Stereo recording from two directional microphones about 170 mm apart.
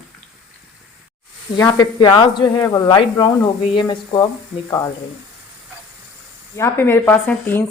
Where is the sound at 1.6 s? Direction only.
25° left (ahead or behind).